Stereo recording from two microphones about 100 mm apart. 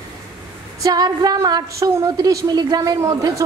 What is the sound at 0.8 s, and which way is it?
A woman's voice, 40° right (ahead or behind).